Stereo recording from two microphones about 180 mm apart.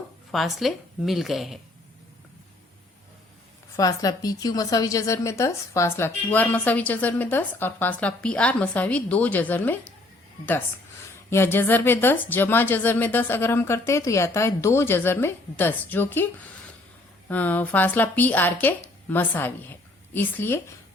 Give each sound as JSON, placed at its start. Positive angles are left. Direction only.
{"t": 0.3, "sound": "a woman's voice", "side_deg": 0}
{"t": 3.8, "sound": "a woman's voice", "side_deg": 20}
{"t": 11.3, "sound": "a woman's voice", "side_deg": 15}
{"t": 17.2, "sound": "a woman's voice", "side_deg": 10}